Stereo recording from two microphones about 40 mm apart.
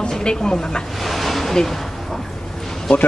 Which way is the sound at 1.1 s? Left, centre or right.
Centre.